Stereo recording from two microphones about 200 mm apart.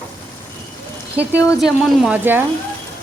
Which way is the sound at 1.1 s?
5° right (ahead or behind).